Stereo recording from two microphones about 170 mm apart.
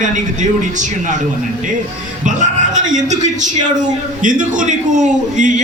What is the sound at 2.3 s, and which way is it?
A man's voice, 45° right (ahead or behind).